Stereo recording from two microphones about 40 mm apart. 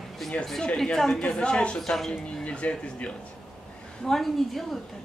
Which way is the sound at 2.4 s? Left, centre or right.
Left.